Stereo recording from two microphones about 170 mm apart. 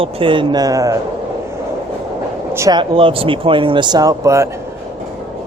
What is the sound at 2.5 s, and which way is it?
Speech, 15° right (ahead or behind).